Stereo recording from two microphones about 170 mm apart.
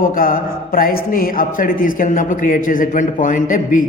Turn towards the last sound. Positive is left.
turn(degrees=50)  # may be behind; listen again after turning